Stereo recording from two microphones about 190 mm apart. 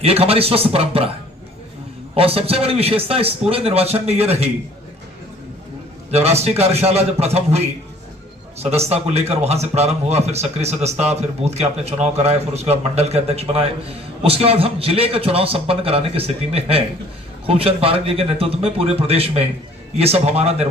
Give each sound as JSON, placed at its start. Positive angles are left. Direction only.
{"t": 0.0, "sound": "speech", "side_deg": -30}
{"t": 2.1, "sound": "speech", "side_deg": -30}
{"t": 6.1, "sound": "a man's voice", "side_deg": -35}